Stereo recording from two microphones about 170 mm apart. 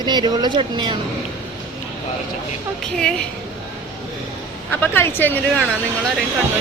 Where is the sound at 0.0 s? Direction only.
25° right (ahead or behind).